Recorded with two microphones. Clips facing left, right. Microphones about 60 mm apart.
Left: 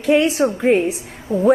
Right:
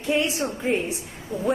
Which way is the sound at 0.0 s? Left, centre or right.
Left.